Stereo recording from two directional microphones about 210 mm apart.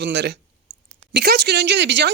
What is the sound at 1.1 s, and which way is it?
Speech, 50° right (ahead or behind).